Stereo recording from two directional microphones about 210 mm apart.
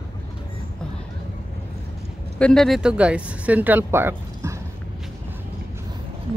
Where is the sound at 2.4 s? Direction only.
5° left (ahead or behind); by 4.6 s 10° right (ahead or behind).